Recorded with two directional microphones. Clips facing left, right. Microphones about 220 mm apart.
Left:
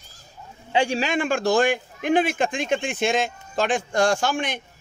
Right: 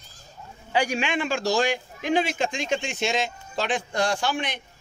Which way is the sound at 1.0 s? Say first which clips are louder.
Left 3 dB; 45° left (ahead or behind).